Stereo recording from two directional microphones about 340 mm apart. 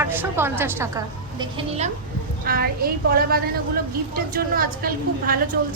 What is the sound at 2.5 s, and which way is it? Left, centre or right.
A woman's voice, right.